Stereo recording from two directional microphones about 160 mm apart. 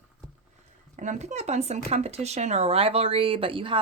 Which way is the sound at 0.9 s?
50° right (ahead or behind).